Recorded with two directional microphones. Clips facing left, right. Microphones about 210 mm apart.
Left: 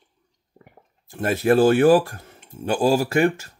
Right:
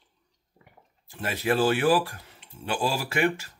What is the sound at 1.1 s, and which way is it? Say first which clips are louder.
Speech: left 8 dB; 45° left (ahead or behind).